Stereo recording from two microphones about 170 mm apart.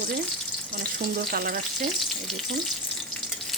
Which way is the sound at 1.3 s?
55° right (ahead or behind).